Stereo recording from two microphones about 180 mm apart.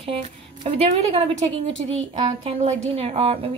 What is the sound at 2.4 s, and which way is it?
A woman's voice, 40° right (ahead or behind).